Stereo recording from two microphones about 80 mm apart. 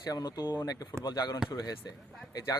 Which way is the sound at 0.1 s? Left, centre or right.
Left.